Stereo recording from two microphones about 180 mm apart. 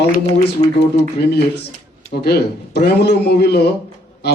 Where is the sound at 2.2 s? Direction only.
65° left (ahead or behind).